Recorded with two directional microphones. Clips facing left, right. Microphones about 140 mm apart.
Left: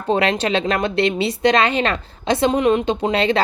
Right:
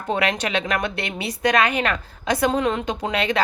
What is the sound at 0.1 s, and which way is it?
Speech, 30° left (ahead or behind).